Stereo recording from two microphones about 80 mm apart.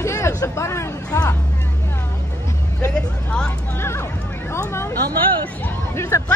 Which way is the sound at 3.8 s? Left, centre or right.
Left.